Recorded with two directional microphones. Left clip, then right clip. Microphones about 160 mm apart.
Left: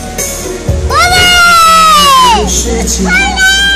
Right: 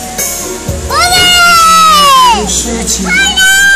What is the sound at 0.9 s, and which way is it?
Children playing, 35° left (ahead or behind).